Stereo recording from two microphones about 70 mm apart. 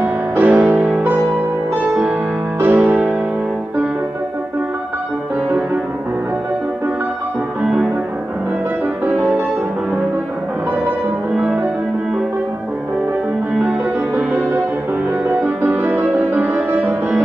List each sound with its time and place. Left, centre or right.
0.0 s music: right
7.6 s music: centre
11.3 s music: centre
14.1 s music: right